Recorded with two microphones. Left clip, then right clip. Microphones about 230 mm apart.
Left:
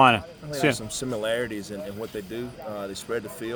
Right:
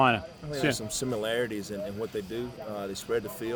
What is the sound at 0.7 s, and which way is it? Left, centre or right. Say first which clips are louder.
Speech: left 1 dB; centre.